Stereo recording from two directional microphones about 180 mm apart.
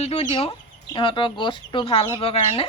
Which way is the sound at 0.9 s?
30° left (ahead or behind).